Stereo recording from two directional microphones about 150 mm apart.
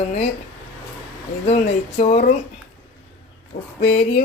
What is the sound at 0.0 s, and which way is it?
Speech, 45° left (ahead or behind).